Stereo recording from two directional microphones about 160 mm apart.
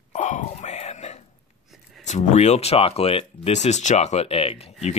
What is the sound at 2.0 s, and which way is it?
Speech, 45° left (ahead or behind).